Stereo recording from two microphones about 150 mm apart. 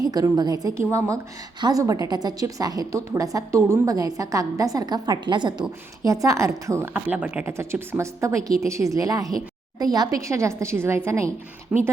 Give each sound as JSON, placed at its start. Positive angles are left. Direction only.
{"t": 0.0, "sound": "a woman's voice", "side_deg": -25}
{"t": 11.7, "sound": "speech", "side_deg": -5}